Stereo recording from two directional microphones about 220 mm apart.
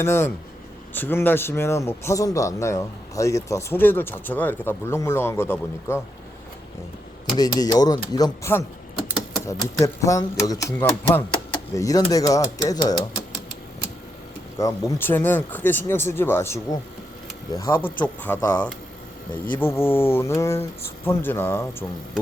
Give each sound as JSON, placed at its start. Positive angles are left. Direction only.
{"t": 0.0, "sound": "a man's voice", "side_deg": 10}
{"t": 7.3, "sound": "a man's voice", "side_deg": 15}
{"t": 14.6, "sound": "a man's voice", "side_deg": 10}